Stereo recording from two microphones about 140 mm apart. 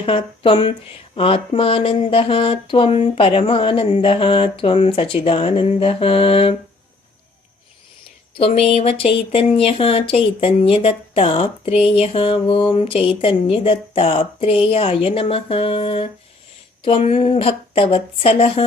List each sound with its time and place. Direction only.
0.0 s speech: 40° left (ahead or behind)
8.4 s speech: 40° left (ahead or behind)